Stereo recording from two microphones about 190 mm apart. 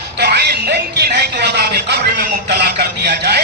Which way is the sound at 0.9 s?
60° right (ahead or behind).